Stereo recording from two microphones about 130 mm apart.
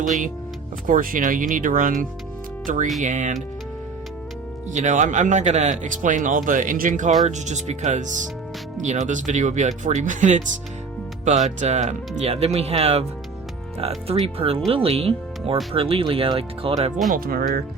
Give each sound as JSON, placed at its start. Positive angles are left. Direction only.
{"t": 0.9, "sound": "speech", "side_deg": -90}
{"t": 2.6, "sound": "speech", "side_deg": -80}
{"t": 3.0, "sound": "speech", "side_deg": -70}
{"t": 4.7, "sound": "speech", "side_deg": -65}
{"t": 7.3, "sound": "speech", "side_deg": -65}